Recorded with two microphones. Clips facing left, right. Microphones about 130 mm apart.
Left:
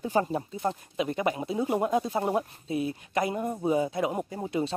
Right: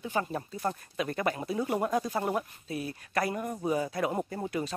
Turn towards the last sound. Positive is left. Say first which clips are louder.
# left 4 dB
turn(degrees=25)  # may be behind; listen again after turning